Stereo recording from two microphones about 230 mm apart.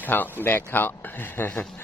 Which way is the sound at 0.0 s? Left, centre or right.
Centre.